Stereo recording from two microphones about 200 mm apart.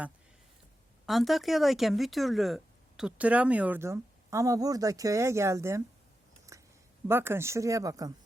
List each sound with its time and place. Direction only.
1.0 s speech: centre (ahead or behind)
6.5 s a sound: 15° right (ahead or behind)
7.1 s speech: 10° right (ahead or behind)